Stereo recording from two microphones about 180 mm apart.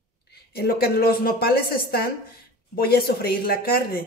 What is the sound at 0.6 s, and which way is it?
A woman's voice, 60° left (ahead or behind).